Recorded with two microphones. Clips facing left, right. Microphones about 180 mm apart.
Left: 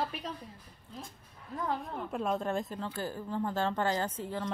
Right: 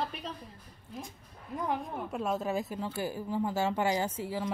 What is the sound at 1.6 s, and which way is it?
Speech, 15° right (ahead or behind).